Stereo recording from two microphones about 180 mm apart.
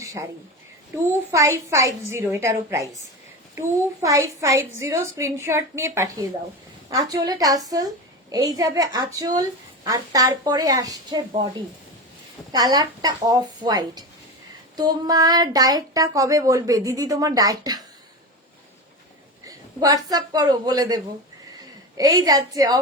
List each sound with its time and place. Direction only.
0.0 s a sound: 15° right (ahead or behind)
1.3 s a woman's voice: 15° right (ahead or behind)
12.5 s speech: 20° right (ahead or behind)
19.5 s a man's voice: 20° right (ahead or behind)